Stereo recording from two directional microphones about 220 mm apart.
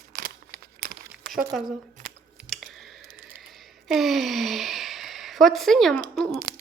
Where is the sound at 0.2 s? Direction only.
40° right (ahead or behind).